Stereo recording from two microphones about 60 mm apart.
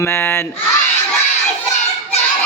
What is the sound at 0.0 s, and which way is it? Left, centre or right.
Speech, left.